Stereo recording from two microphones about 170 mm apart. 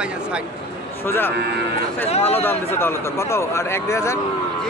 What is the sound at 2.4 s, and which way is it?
Speech, 15° left (ahead or behind).